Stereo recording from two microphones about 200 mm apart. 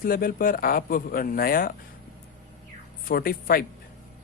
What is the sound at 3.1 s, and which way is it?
Speech, 45° left (ahead or behind).